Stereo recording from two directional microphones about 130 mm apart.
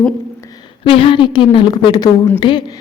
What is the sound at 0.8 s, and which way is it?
Speech, 45° left (ahead or behind).